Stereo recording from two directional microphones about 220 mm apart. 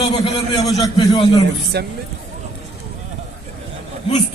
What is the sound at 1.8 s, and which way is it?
Speech, 45° right (ahead or behind).